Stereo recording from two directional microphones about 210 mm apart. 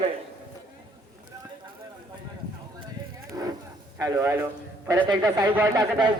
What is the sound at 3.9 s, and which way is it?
A man's voice, 15° right (ahead or behind).